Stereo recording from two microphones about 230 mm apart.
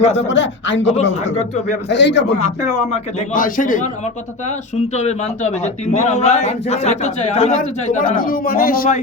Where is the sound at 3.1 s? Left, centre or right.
Left.